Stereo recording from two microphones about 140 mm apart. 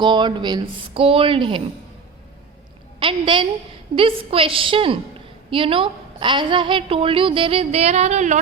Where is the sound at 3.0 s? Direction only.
35° right (ahead or behind); by 8.4 s 55° right (ahead or behind).